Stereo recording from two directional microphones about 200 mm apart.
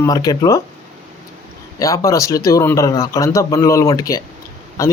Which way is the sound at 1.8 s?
15° left (ahead or behind).